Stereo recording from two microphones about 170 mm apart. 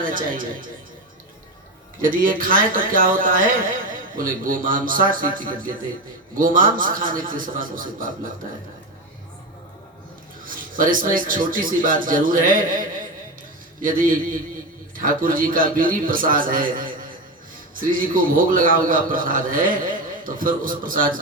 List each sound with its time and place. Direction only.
0.0 s a man's voice: 55° right (ahead or behind)
2.0 s speech: 55° right (ahead or behind)
10.4 s a man's voice: 55° right (ahead or behind)